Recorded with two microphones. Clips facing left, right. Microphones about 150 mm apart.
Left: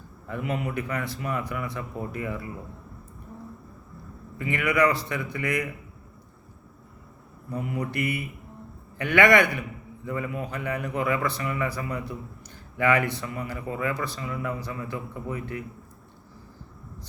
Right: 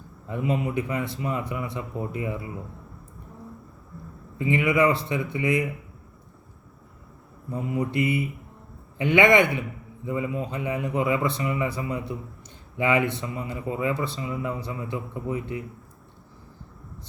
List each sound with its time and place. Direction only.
0.3 s a man's voice: 20° right (ahead or behind)
4.4 s a man's voice: 20° right (ahead or behind)
7.5 s a man's voice: 20° right (ahead or behind)